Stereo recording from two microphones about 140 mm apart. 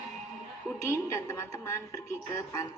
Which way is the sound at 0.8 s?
20° left (ahead or behind).